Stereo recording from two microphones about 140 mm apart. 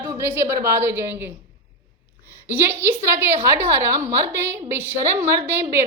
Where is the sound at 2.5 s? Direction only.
15° right (ahead or behind).